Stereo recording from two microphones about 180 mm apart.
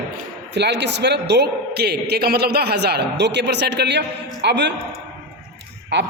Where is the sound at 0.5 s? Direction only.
70° right (ahead or behind).